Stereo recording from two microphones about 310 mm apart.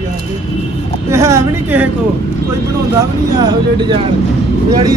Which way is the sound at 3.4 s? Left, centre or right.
Centre.